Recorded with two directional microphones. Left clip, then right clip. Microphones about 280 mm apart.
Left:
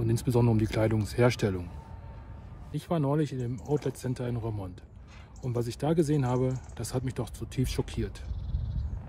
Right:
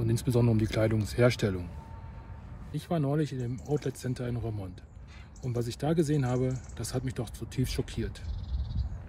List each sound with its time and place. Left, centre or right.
0.0 s speech: centre
2.7 s speech: centre